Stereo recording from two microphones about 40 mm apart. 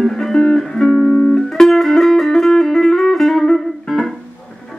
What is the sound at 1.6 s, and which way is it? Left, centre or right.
Music, centre.